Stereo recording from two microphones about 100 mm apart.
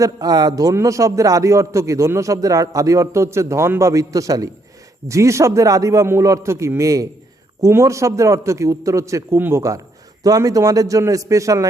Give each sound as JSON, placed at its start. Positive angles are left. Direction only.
{"t": 0.0, "sound": "a man's voice", "side_deg": -40}